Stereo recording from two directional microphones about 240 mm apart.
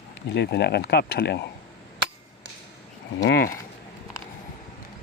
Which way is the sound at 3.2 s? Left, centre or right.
Left.